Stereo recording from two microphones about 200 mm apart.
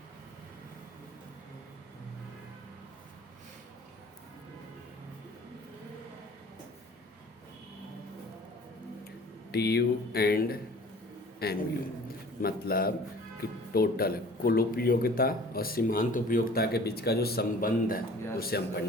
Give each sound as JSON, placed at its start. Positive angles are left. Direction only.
{"t": 9.5, "sound": "speech", "side_deg": 55}